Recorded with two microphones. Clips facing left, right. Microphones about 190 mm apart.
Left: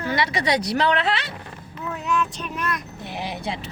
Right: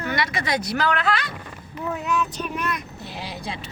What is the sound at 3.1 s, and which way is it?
Vehicle, 20° left (ahead or behind).